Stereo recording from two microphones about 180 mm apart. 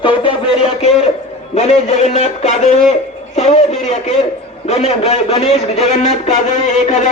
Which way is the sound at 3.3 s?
40° left (ahead or behind).